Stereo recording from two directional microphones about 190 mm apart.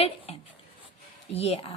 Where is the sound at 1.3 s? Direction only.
30° left (ahead or behind).